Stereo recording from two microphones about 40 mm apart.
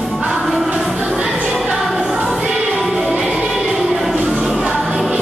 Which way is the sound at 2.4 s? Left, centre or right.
Right.